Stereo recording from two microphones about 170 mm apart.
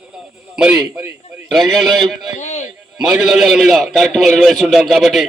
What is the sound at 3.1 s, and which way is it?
A man's voice, centre (ahead or behind).